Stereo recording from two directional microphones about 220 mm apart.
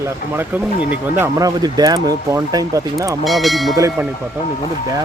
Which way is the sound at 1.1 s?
15° right (ahead or behind).